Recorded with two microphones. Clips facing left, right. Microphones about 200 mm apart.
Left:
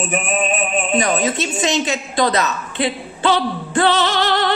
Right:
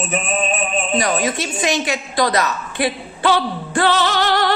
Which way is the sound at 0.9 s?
20° left (ahead or behind).